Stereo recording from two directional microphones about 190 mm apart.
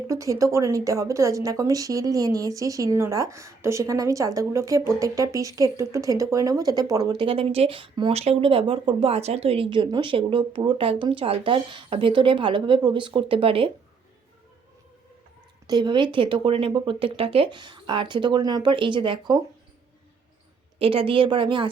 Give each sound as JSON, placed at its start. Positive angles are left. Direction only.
{"t": 0.1, "sound": "a woman's voice", "side_deg": -15}
{"t": 15.6, "sound": "a woman's voice", "side_deg": -20}
{"t": 20.7, "sound": "a woman's voice", "side_deg": -30}